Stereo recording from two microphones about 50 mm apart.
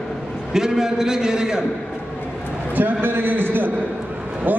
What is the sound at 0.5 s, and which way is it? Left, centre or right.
A man's voice, centre.